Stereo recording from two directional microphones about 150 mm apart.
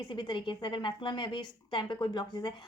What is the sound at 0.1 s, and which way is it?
A woman's voice, 30° left (ahead or behind).